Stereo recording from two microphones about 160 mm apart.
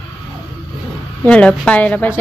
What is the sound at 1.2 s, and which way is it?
Speech, 5° left (ahead or behind).